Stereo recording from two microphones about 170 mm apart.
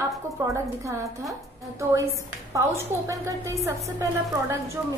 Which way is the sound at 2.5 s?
20° right (ahead or behind).